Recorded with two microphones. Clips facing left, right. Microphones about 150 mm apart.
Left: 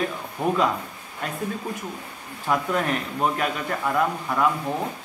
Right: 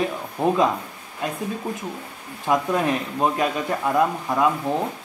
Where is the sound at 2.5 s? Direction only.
20° right (ahead or behind).